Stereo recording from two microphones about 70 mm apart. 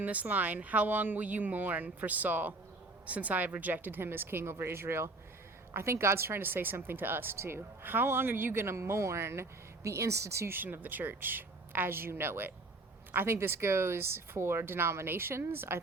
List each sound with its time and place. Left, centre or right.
0.0 s speech: right
10.5 s speech: right